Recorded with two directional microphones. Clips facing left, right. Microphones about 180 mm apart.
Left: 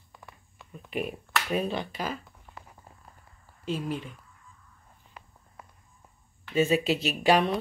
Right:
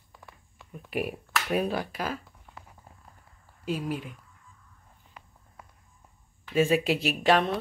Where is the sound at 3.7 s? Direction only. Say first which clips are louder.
Right 1 dB; 10° right (ahead or behind).